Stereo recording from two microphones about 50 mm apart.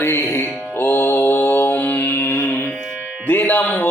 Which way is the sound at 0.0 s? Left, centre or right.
Left.